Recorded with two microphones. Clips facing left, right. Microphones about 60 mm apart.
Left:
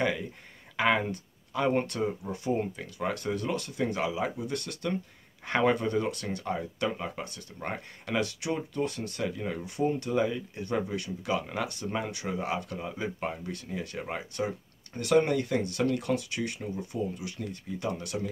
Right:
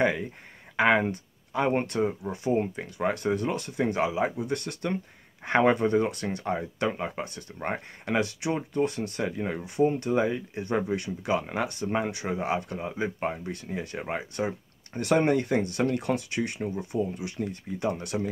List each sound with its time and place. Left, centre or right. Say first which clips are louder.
0.0 s speech: right 4 dB; right